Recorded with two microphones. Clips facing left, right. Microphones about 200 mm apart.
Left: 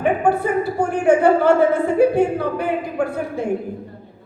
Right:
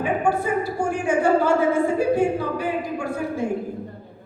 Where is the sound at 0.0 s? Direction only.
60° left (ahead or behind).